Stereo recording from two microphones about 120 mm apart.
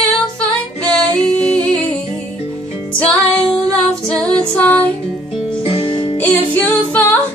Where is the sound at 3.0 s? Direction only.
10° left (ahead or behind).